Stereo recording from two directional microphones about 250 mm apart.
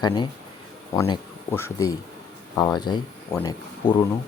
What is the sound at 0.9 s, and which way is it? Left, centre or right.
Speech, centre.